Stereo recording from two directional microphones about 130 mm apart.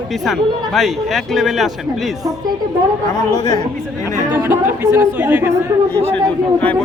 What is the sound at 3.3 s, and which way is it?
Speech, 30° left (ahead or behind).